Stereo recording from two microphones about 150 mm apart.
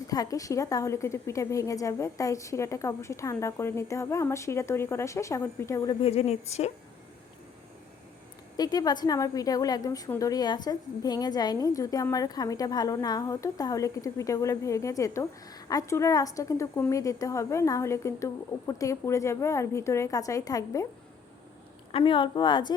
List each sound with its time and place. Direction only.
0.1 s a woman's voice: 25° left (ahead or behind)
6.0 s a woman's voice: 45° left (ahead or behind)
8.5 s a woman's voice: 25° left (ahead or behind)
21.9 s a woman's voice: 35° left (ahead or behind)